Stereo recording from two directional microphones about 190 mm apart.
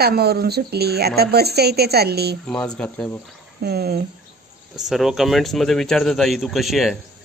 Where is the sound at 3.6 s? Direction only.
55° right (ahead or behind).